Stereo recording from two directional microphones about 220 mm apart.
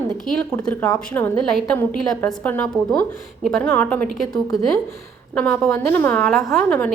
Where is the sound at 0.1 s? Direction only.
Centre (ahead or behind).